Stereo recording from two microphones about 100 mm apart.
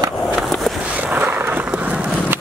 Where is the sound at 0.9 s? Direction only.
15° right (ahead or behind).